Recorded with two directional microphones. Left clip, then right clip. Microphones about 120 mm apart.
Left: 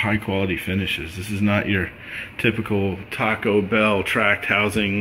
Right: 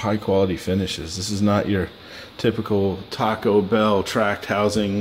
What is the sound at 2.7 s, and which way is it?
Speech, 25° right (ahead or behind).